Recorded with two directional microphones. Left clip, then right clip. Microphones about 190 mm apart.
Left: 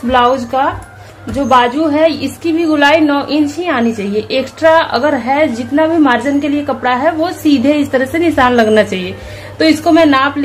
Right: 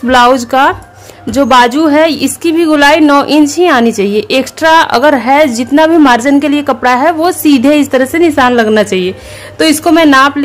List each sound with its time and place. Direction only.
0.1 s a woman's voice: 45° right (ahead or behind)